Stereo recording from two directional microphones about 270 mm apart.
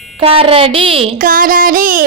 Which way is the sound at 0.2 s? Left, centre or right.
Right.